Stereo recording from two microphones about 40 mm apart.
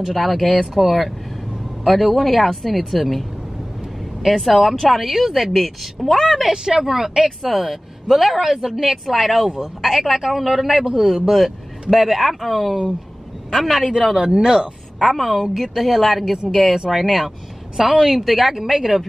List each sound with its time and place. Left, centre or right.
0.1 s speech: centre
6.5 s a man's voice: centre
10.9 s a man's voice: right; by 13.8 s centre
13.9 s a man's voice: centre
15.0 s speech: centre